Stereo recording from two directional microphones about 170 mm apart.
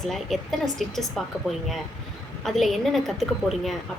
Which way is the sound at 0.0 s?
Centre (ahead or behind).